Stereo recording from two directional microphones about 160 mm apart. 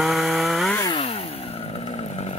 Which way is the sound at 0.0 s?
Centre (ahead or behind).